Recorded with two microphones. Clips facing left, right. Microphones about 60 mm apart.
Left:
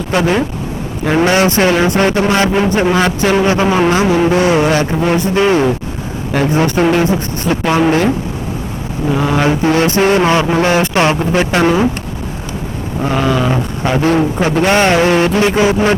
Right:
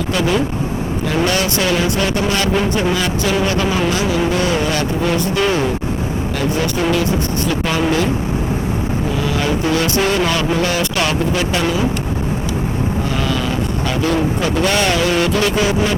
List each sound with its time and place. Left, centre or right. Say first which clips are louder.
0.1 s speech: left 4 dB; left
9.2 s speech: left 7 dB; left
13.1 s speech: left 5 dB; left